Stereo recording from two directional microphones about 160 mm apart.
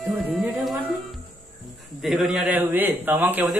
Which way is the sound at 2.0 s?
Centre (ahead or behind).